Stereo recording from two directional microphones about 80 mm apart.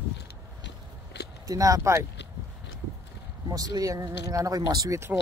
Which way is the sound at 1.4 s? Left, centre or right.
Right.